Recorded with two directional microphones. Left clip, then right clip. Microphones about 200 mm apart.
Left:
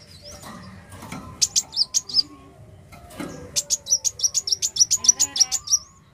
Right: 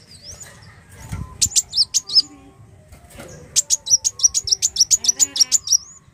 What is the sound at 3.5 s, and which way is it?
Chirp, 20° right (ahead or behind).